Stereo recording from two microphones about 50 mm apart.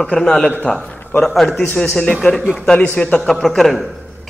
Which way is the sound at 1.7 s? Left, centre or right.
Centre.